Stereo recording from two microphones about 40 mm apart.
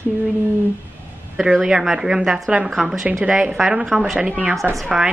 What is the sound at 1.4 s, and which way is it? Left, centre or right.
Speech, centre.